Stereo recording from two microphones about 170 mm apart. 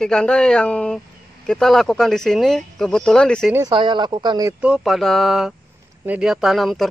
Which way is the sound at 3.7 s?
25° right (ahead or behind).